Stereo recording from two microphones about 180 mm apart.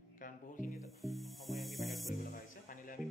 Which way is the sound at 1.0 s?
Centre (ahead or behind).